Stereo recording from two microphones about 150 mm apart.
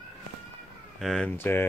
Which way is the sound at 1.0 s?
5° left (ahead or behind).